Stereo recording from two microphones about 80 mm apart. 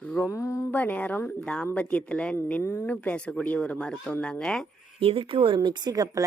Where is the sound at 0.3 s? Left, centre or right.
Left.